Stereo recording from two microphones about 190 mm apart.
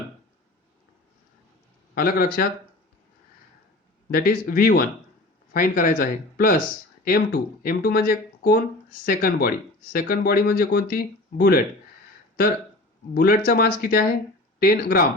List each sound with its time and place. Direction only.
2.0 s speech: 50° left (ahead or behind)
4.1 s speech: 50° left (ahead or behind)
13.1 s speech: 50° left (ahead or behind)